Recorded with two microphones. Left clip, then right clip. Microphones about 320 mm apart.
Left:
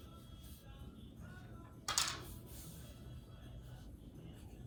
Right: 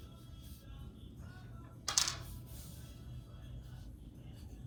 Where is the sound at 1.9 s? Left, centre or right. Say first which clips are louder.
Right 3 dB; right.